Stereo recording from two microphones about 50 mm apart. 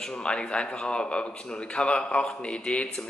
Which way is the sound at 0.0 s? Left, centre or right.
Centre.